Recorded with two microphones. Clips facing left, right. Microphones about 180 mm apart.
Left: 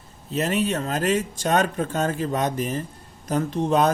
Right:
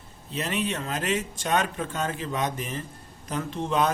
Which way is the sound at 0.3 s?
45° left (ahead or behind).